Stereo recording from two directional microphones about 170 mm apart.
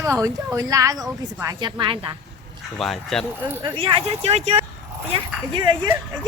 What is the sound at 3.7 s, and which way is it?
Speech, 35° right (ahead or behind).